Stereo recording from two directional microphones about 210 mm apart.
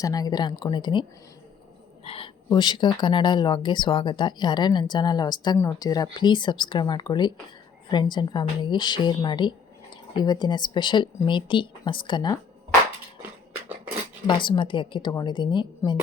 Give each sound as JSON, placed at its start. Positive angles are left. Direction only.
{"t": 0.0, "sound": "speech", "side_deg": 15}
{"t": 2.0, "sound": "speech", "side_deg": 25}
{"t": 13.5, "sound": "a sound", "side_deg": -5}
{"t": 14.3, "sound": "speech", "side_deg": 20}